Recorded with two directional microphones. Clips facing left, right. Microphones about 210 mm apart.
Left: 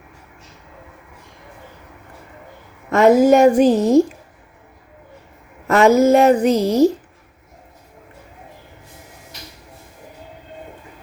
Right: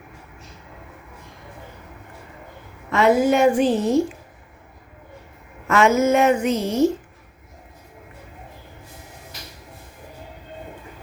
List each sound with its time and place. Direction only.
2.9 s speech: 45° left (ahead or behind)
5.6 s speech: 35° left (ahead or behind)